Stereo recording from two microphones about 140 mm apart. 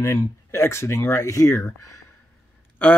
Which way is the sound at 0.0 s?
20° left (ahead or behind).